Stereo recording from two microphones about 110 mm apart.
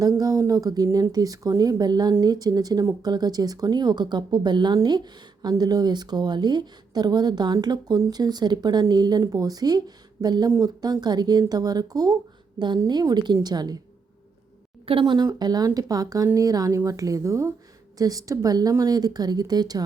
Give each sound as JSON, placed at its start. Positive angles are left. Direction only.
{"t": 0.2, "sound": "a sound", "side_deg": -35}
{"t": 1.1, "sound": "a woman's voice", "side_deg": -35}
{"t": 14.8, "sound": "speech", "side_deg": -50}